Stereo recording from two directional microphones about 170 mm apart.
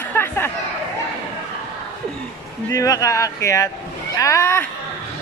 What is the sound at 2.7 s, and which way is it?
A man's voice, 20° left (ahead or behind).